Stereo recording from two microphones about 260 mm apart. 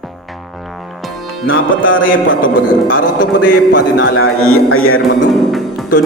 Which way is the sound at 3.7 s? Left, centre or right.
Left.